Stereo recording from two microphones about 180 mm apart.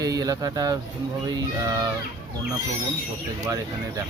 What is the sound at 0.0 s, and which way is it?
Speech, 20° right (ahead or behind).